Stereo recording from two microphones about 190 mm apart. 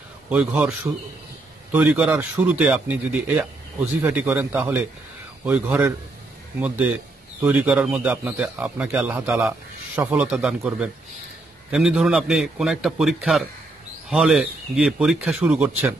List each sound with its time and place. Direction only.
0.3 s a man's voice: 5° right (ahead or behind)
7.4 s a man's voice: 10° right (ahead or behind)